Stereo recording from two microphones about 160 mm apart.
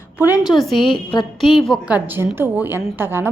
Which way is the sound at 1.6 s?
Centre (ahead or behind).